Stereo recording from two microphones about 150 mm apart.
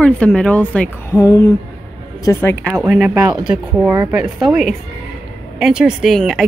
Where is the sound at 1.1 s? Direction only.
20° left (ahead or behind).